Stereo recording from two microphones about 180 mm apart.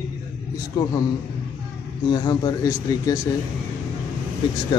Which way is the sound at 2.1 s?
20° left (ahead or behind).